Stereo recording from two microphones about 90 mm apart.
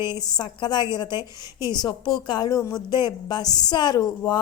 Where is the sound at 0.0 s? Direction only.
55° left (ahead or behind).